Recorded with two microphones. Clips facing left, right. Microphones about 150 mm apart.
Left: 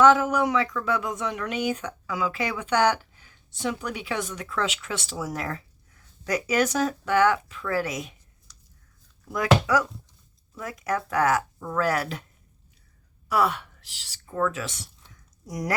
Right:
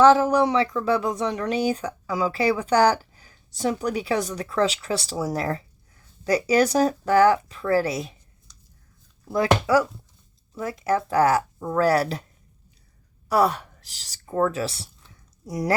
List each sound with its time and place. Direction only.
0.0 s speech: 35° right (ahead or behind)
9.2 s speech: 30° right (ahead or behind)
13.2 s speech: 40° right (ahead or behind)